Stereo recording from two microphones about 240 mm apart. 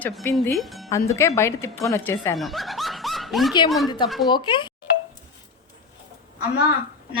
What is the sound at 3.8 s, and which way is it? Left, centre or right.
Speech, centre.